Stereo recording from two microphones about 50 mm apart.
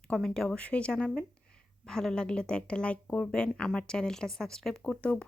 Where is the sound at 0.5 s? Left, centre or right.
Left.